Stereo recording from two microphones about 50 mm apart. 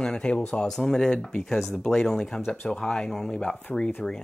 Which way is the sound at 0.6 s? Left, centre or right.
Centre.